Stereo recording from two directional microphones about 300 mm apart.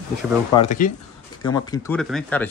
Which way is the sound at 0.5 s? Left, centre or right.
Left.